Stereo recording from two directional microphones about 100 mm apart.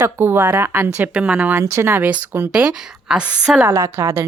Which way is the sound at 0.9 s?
10° right (ahead or behind).